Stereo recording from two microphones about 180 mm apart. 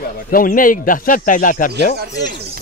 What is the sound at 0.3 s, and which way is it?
Speech, 50° left (ahead or behind).